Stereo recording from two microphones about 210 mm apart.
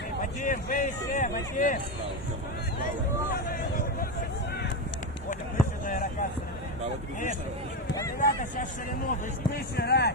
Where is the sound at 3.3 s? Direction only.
45° left (ahead or behind).